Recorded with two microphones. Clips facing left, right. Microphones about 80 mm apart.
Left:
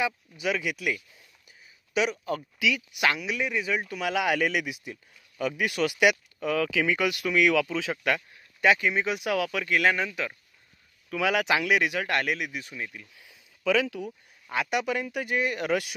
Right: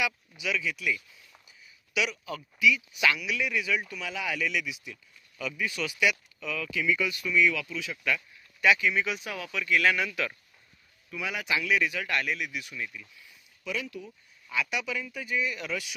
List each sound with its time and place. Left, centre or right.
0.0 s speech: left
2.6 s speech: left
3.0 s speech: left
4.0 s speech: left
5.8 s speech: left
8.5 s speech: left
9.2 s speech: left
9.8 s speech: left
11.1 s speech: left
11.6 s speech: left
12.0 s speech: left
13.8 s speech: left
14.5 s speech: left